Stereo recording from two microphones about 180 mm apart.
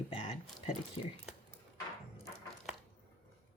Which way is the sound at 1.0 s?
30° left (ahead or behind).